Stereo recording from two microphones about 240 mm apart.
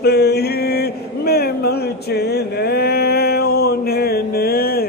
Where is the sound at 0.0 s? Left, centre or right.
Left.